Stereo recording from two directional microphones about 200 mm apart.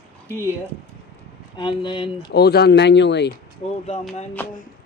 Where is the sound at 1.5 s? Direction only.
25° left (ahead or behind).